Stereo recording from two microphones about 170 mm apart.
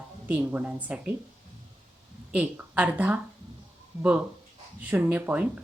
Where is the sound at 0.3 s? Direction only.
10° right (ahead or behind).